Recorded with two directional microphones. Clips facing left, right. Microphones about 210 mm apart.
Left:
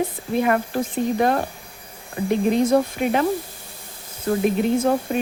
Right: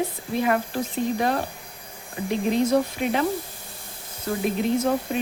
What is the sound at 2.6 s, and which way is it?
Speech, 50° left (ahead or behind).